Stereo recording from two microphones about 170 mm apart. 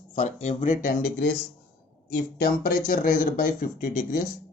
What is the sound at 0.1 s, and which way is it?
Speech, 45° left (ahead or behind).